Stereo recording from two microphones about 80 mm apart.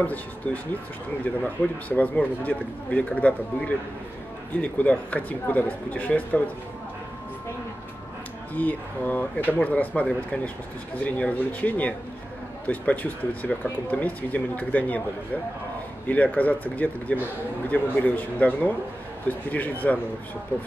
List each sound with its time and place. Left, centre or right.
0.0 s speech: centre
1.9 s speech: centre
8.5 s speech: centre
16.1 s speech: centre